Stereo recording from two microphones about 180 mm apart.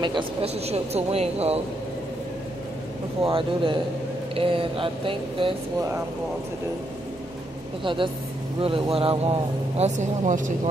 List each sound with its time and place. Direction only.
0.0 s speech: 30° right (ahead or behind)
3.3 s speech: 30° right (ahead or behind)
7.8 s speech: 25° right (ahead or behind); by 10.5 s 45° right (ahead or behind)